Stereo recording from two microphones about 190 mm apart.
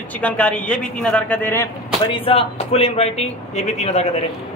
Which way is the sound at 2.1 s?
30° left (ahead or behind).